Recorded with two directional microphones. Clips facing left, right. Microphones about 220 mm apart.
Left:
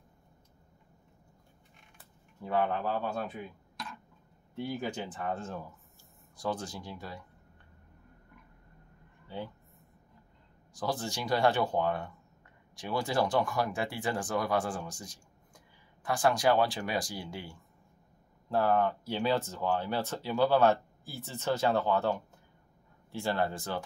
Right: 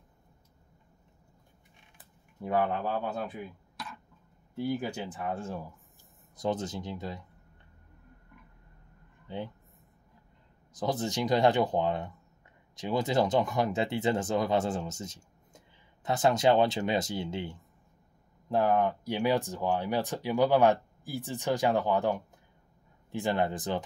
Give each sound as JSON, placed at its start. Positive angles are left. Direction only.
{"t": 2.0, "sound": "a sound", "side_deg": -15}
{"t": 4.6, "sound": "speech", "side_deg": -5}
{"t": 9.3, "sound": "speech", "side_deg": -20}
{"t": 10.7, "sound": "speech", "side_deg": -20}